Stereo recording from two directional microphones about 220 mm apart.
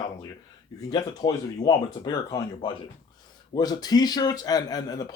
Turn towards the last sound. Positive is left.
turn(degrees=15)  # may be behind; listen again after turning